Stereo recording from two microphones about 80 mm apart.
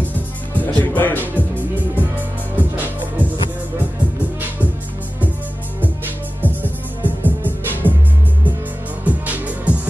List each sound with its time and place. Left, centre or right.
0.6 s speech: left
2.5 s music: right
6.4 s music: right
9.0 s music: centre